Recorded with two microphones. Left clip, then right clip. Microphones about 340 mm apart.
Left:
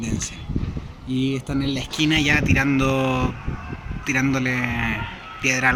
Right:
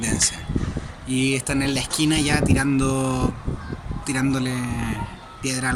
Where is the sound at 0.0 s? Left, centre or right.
Centre.